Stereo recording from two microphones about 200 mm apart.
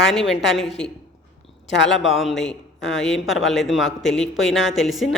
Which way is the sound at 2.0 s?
Centre (ahead or behind).